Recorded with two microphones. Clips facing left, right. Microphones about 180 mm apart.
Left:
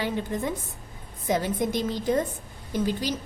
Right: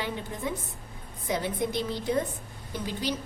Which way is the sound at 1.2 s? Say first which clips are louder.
Left 4 dB; 45° left (ahead or behind).